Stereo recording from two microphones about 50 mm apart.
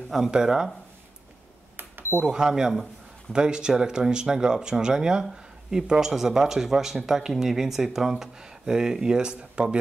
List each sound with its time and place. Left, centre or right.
0.3 s speech: centre
2.2 s speech: centre